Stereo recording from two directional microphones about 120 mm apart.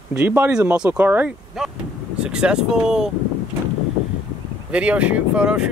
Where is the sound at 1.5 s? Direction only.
Centre (ahead or behind).